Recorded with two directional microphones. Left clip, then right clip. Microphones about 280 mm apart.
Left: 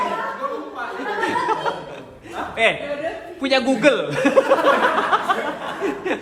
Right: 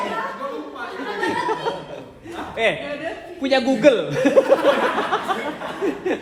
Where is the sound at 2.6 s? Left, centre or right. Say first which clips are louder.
Left 2 dB; left.